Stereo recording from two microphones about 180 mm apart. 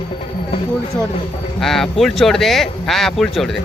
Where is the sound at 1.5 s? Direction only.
Centre (ahead or behind).